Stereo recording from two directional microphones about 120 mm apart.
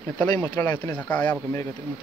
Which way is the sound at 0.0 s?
15° left (ahead or behind).